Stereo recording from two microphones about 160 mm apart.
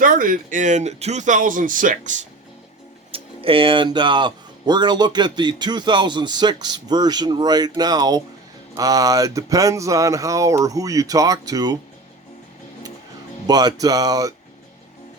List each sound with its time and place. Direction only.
0.0 s speech: 60° right (ahead or behind)
3.1 s speech: 35° right (ahead or behind)
13.5 s speech: 25° right (ahead or behind)